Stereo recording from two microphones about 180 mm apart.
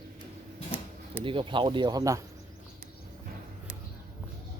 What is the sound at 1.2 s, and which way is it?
Speech, 30° right (ahead or behind).